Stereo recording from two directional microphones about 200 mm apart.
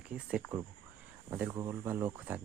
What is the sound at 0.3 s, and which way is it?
Speech, 5° right (ahead or behind).